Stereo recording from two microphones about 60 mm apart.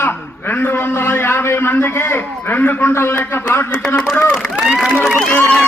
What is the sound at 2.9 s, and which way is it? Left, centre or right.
Speech, left.